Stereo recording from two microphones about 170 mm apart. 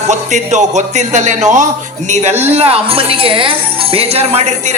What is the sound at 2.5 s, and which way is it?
Speech, 35° right (ahead or behind).